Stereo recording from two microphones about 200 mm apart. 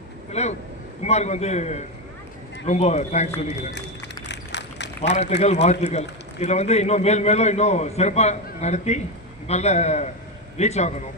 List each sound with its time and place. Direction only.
0.3 s a man's voice: 35° left (ahead or behind)
3.7 s run: 60° left (ahead or behind)
5.4 s a man's voice: 35° left (ahead or behind)